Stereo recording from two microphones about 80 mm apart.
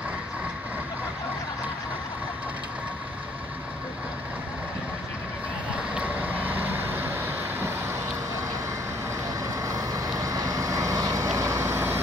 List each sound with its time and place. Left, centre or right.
5.9 s vehicle: right
9.4 s vehicle: right